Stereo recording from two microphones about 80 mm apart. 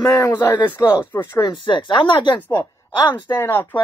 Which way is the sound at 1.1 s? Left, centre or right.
Left.